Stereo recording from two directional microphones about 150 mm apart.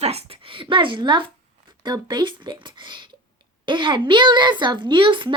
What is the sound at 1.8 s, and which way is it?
A woman's voice, 30° right (ahead or behind).